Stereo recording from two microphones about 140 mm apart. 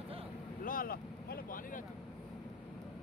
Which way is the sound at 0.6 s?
85° left.